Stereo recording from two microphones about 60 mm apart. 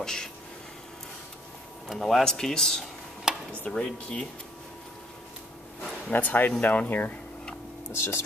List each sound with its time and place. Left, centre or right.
0.0 s a sound: centre
2.0 s speech: centre
3.3 s a sound: centre
3.6 s speech: centre
6.1 s speech: left
7.9 s speech: left